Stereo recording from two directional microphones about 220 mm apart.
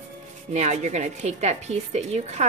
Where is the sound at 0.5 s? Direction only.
30° right (ahead or behind).